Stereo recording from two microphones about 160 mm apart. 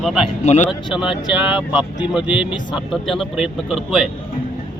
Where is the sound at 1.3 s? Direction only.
5° right (ahead or behind).